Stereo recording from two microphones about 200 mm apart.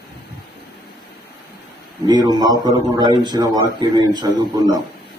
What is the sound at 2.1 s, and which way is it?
A man's voice, 20° right (ahead or behind).